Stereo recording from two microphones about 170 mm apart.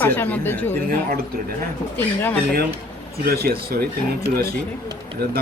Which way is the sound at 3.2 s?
65° right (ahead or behind).